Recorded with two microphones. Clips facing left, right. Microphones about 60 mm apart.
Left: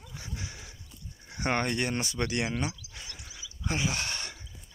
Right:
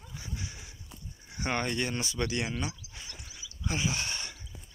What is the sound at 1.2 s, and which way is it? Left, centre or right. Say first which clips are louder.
Speech: left 3 dB; left.